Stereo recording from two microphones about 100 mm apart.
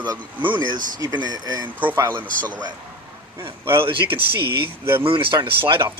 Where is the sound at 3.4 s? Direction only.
25° right (ahead or behind).